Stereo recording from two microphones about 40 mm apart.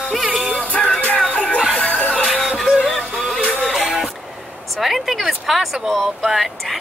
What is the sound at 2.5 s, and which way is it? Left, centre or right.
Music, centre.